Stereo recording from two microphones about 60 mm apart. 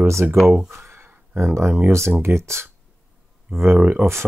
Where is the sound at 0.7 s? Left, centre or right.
Right.